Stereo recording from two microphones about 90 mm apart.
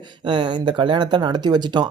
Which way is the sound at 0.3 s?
60° right (ahead or behind).